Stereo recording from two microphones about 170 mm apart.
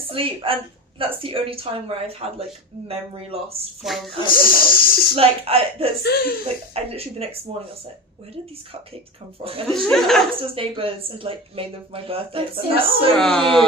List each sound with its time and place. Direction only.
0.1 s speech: 30° right (ahead or behind)
3.8 s speech: centre (ahead or behind)
4.3 s speech: 60° left (ahead or behind)
5.1 s speech: 35° right (ahead or behind)
6.0 s speech: 70° left (ahead or behind)
6.7 s speech: 35° right (ahead or behind)
9.4 s speech: 35° right (ahead or behind)
9.6 s speech: 5° left (ahead or behind)
10.4 s speech: 35° right (ahead or behind)
13.1 s speech: 5° left (ahead or behind)